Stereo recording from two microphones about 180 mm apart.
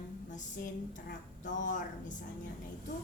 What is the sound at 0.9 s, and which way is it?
A woman's voice, 45° left (ahead or behind).